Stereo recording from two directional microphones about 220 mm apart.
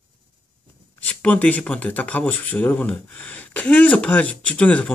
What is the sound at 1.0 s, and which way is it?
Speech, 5° left (ahead or behind).